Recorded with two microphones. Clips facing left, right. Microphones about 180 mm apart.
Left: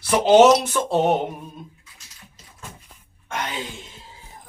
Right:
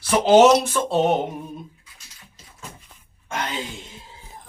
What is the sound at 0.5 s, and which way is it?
Speech, 10° left (ahead or behind).